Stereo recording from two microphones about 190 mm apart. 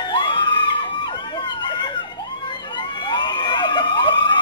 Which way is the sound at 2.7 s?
25° left (ahead or behind).